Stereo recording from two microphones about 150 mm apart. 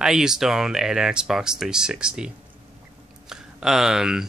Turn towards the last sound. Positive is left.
turn(degrees=-5)  # may be behind; listen again after turning